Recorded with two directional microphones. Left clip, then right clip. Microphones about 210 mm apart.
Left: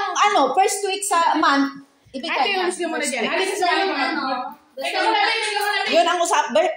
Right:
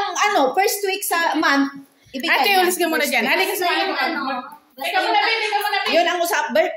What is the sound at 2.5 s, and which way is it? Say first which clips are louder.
Speech: right 5 dB; 55° right (ahead or behind).